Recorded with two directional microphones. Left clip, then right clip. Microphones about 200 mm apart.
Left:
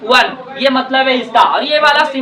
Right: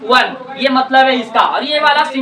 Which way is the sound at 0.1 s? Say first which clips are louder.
Left 1 dB; 20° left (ahead or behind).